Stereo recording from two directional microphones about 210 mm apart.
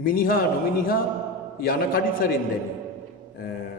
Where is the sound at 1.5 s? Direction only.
45° left (ahead or behind).